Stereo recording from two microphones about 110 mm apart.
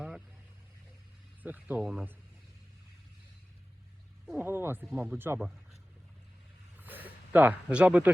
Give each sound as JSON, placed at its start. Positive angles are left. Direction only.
{"t": 1.4, "sound": "speech", "side_deg": -15}
{"t": 4.4, "sound": "speech", "side_deg": -20}
{"t": 6.7, "sound": "a sound", "side_deg": -15}